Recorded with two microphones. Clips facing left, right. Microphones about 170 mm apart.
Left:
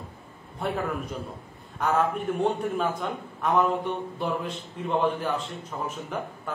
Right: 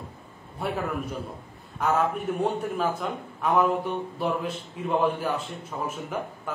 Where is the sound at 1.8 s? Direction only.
5° right (ahead or behind).